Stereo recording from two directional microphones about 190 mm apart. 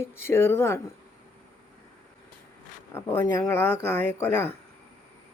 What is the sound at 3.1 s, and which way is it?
Speech, 10° left (ahead or behind).